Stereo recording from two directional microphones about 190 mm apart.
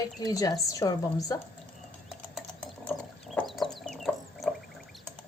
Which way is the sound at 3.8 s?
Centre (ahead or behind).